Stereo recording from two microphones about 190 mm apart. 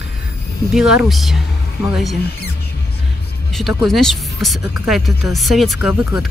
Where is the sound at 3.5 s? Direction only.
Centre (ahead or behind).